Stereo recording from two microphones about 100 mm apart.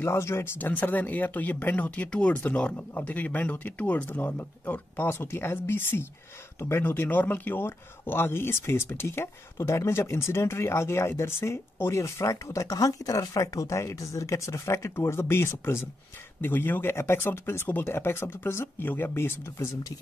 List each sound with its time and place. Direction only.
0.0 s speech: 25° left (ahead or behind)